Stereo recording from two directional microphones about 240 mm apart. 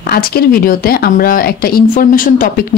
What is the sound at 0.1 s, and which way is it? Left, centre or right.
A woman's voice, left.